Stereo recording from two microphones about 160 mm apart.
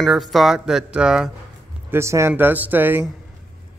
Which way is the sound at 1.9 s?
15° right (ahead or behind).